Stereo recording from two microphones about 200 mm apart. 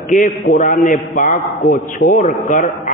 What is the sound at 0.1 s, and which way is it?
A man's voice, 40° left (ahead or behind).